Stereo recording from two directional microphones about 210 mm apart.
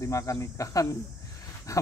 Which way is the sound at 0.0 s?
15° left (ahead or behind).